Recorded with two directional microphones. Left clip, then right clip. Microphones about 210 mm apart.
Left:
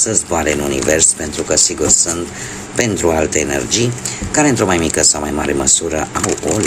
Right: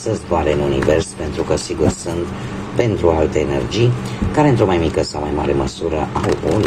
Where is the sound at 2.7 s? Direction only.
40° left (ahead or behind).